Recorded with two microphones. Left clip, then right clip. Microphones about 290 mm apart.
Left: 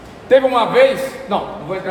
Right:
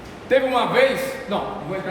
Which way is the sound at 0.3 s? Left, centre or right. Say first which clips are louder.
Left 6 dB; centre.